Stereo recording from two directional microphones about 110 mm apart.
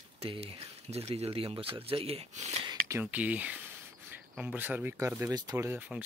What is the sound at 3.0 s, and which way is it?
Speech, 15° right (ahead or behind).